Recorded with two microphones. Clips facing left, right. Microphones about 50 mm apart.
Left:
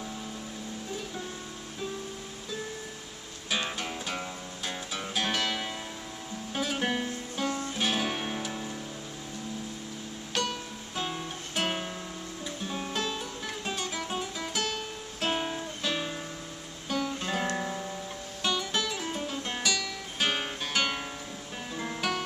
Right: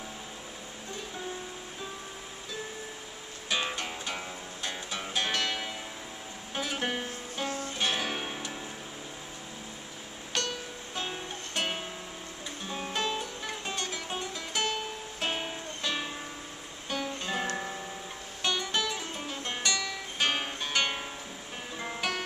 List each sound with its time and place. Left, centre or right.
3.4 s music: centre
10.3 s music: centre
14.6 s music: centre
15.2 s music: centre
17.6 s guitar: centre
18.4 s music: centre